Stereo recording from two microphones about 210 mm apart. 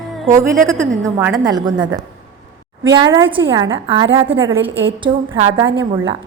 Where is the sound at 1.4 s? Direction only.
20° right (ahead or behind).